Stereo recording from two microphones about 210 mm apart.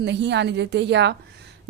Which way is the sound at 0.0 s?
55° right (ahead or behind).